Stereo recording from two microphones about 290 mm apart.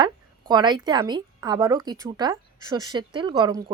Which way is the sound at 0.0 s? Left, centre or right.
Centre.